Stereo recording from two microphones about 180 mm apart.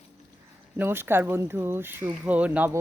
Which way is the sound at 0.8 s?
10° right (ahead or behind).